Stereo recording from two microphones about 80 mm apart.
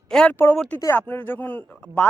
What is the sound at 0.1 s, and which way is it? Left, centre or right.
Speech, centre.